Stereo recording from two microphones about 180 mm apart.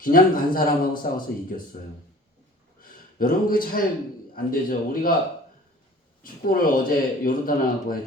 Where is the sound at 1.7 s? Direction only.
45° left (ahead or behind).